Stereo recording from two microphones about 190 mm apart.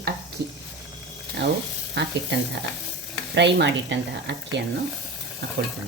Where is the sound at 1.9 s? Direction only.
65° right (ahead or behind).